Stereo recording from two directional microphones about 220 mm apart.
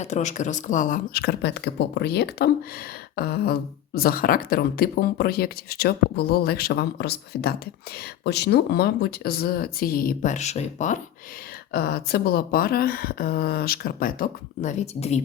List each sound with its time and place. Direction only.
0.0 s speech: 30° left (ahead or behind)
11.7 s speech: 45° left (ahead or behind)